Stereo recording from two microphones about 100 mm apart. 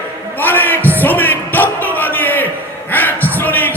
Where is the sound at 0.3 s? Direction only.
20° left (ahead or behind).